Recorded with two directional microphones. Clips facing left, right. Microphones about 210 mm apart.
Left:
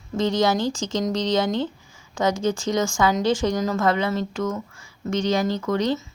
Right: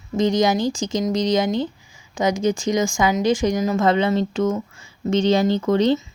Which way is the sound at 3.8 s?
25° right (ahead or behind).